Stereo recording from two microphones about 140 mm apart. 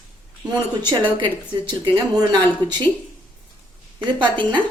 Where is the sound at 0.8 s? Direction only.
35° right (ahead or behind).